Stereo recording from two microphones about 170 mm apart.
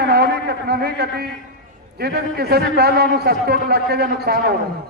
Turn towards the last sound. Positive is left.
turn(degrees=-65)  # may be behind; listen again after turning